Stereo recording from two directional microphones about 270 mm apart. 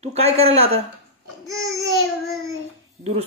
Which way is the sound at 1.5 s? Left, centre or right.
Centre.